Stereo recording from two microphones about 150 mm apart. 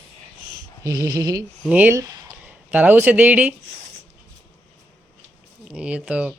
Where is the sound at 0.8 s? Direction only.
20° right (ahead or behind).